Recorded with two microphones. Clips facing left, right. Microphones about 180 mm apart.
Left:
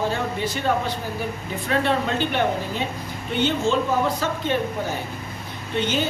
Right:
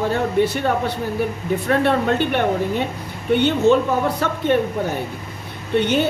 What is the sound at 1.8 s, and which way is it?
Speech, 60° right (ahead or behind).